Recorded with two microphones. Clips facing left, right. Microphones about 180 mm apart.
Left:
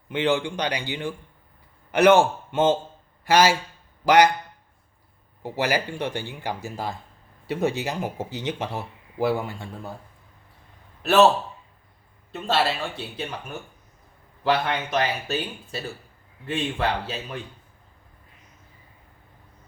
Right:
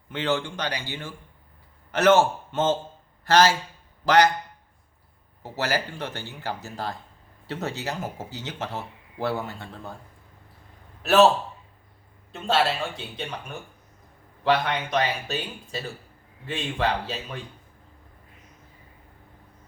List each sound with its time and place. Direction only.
0.1 s a man's voice: 15° left (ahead or behind)
5.4 s speech: 15° left (ahead or behind)
11.0 s a man's voice: centre (ahead or behind)
12.3 s speech: centre (ahead or behind)